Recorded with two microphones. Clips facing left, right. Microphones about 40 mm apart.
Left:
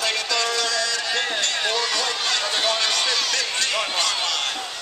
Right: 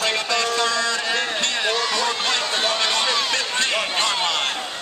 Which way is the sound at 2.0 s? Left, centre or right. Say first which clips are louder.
Right 2 dB; right.